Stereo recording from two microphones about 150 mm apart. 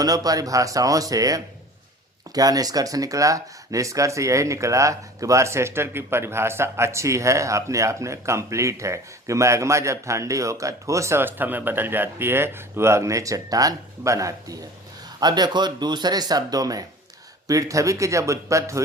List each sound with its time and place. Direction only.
0.0 s speech: 25° right (ahead or behind)